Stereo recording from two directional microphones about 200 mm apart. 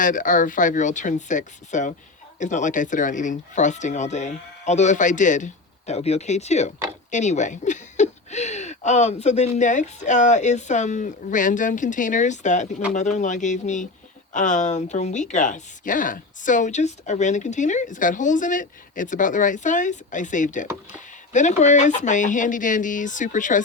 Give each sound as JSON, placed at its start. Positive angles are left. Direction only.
{"t": 0.0, "sound": "speech", "side_deg": 40}